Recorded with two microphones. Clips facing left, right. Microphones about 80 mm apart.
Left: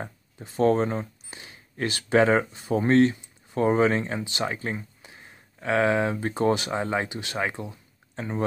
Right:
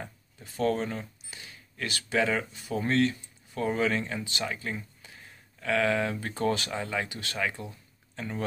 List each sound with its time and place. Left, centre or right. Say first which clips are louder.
0.4 s speech: left 6 dB; left